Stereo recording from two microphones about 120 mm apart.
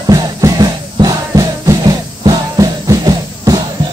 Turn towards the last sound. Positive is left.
turn(degrees=-30)  # may be behind; listen again after turning